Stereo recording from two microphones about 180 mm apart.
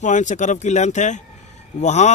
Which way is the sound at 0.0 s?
45° left (ahead or behind).